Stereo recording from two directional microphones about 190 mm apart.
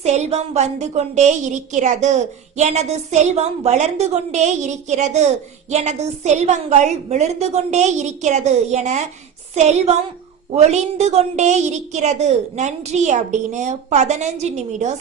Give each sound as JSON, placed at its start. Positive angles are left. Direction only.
{"t": 0.0, "sound": "a woman's voice", "side_deg": -35}